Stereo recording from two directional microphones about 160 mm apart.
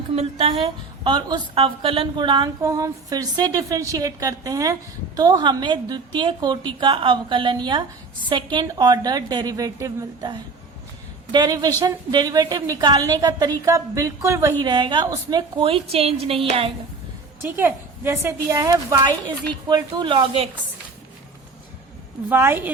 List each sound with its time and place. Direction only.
0.2 s a woman's voice: 40° right (ahead or behind); by 14.5 s 15° right (ahead or behind)
14.6 s a woman's voice: 30° right (ahead or behind)
17.6 s a woman's voice: 15° right (ahead or behind); by 20.5 s 35° right (ahead or behind)
22.3 s a woman's voice: 15° right (ahead or behind)